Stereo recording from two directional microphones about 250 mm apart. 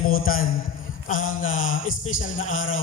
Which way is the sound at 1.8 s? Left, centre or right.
Left.